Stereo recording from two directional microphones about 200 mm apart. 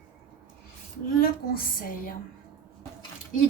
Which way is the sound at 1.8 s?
45° left (ahead or behind).